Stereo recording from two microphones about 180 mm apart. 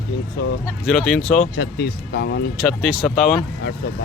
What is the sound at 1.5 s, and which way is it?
Speech, 65° left (ahead or behind).